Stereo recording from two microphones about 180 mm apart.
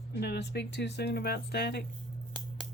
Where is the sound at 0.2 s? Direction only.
70° left (ahead or behind).